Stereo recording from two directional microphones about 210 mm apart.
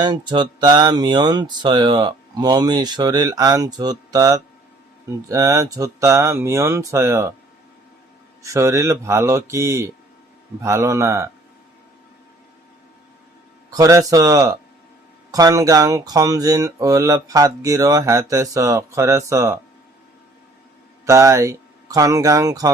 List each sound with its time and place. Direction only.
0.0 s speech: 20° right (ahead or behind)
8.4 s speech: 15° right (ahead or behind)
13.7 s speech: 15° right (ahead or behind)
21.0 s speech: 15° right (ahead or behind)